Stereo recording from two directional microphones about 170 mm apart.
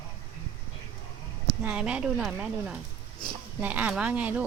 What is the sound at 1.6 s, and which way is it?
Speech, 5° right (ahead or behind).